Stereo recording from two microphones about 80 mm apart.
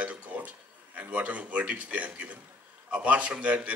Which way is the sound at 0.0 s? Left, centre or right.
Centre.